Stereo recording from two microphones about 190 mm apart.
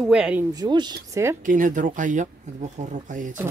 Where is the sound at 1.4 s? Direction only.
45° right (ahead or behind).